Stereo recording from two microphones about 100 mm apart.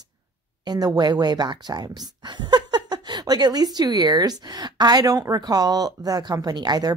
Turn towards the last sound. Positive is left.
turn(degrees=-45)  # may be behind; listen again after turning